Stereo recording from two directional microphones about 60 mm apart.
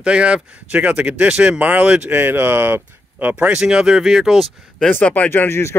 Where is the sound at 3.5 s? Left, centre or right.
Centre.